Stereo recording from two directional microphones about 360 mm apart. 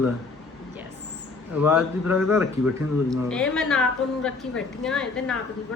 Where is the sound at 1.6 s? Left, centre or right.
Centre.